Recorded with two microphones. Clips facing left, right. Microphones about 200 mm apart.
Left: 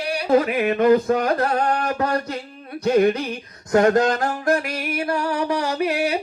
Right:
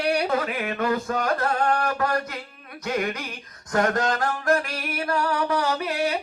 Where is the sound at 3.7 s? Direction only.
25° left (ahead or behind).